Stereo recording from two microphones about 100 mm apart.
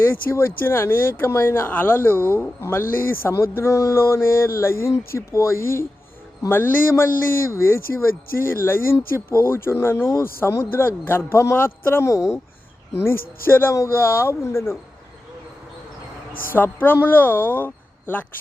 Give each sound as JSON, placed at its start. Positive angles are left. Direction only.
{"t": 0.0, "sound": "speech", "side_deg": 25}
{"t": 16.6, "sound": "speech", "side_deg": 20}